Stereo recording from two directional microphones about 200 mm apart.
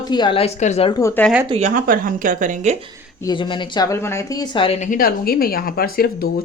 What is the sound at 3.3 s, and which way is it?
Speech, 25° left (ahead or behind).